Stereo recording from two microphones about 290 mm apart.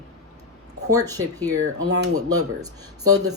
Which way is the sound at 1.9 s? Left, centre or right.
Right.